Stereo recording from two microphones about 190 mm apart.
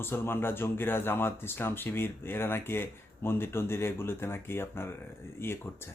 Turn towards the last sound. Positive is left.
turn(degrees=10)  # may be behind; listen again after turning